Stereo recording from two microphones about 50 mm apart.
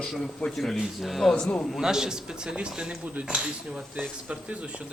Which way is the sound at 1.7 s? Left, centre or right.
Centre.